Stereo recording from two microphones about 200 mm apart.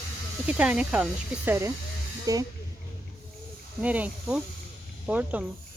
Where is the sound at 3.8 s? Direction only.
5° right (ahead or behind).